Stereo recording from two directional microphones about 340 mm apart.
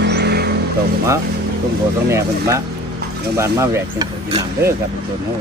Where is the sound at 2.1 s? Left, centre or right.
Centre.